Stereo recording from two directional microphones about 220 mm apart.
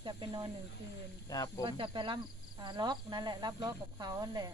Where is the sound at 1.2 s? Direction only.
15° left (ahead or behind).